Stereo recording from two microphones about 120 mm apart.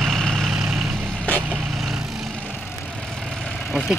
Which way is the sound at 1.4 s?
15° right (ahead or behind).